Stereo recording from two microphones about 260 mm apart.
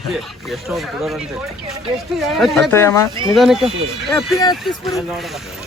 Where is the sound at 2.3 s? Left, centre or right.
Centre.